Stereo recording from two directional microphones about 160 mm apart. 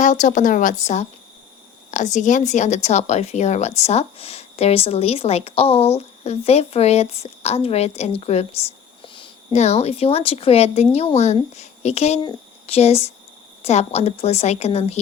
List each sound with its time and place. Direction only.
0.0 s a woman's voice: 50° left (ahead or behind)